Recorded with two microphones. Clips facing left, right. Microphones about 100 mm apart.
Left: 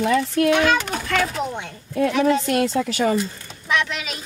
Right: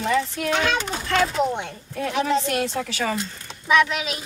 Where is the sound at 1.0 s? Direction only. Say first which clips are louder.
Right 3 dB; 30° right (ahead or behind).